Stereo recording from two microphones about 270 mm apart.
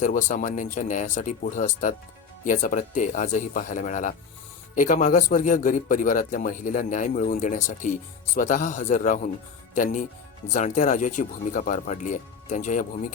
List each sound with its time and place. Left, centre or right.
0.0 s speech: left